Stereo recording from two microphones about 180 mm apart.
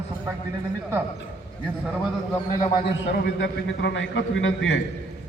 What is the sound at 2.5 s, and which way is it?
A man's voice, 55° left (ahead or behind).